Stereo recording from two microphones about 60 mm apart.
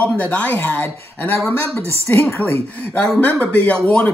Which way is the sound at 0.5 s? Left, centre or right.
Left.